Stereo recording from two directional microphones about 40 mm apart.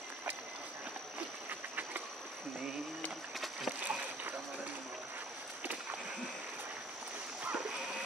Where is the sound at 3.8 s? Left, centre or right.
Right.